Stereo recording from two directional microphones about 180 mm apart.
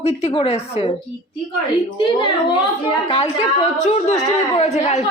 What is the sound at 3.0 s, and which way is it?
A woman's voice, 30° left (ahead or behind).